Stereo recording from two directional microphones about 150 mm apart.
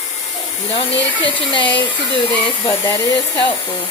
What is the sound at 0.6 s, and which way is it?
Speech, 40° left (ahead or behind).